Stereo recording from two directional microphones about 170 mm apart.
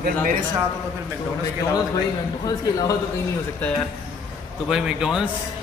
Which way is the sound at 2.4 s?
20° left (ahead or behind).